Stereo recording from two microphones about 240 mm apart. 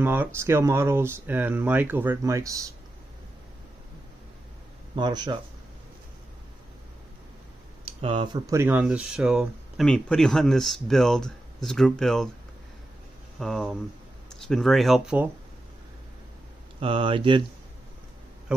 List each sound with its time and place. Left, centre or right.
0.0 s speech: centre
4.9 s speech: centre
7.8 s speech: right; by 12.3 s centre
13.4 s speech: centre
16.8 s speech: right